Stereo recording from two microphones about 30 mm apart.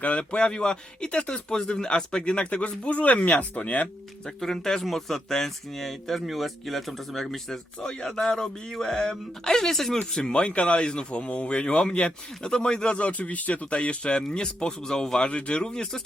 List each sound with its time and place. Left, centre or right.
0.2 s speech: left
2.9 s speech: left
4.4 s speech: centre
7.5 s speech: centre
10.2 s speech: left
15.2 s speech: left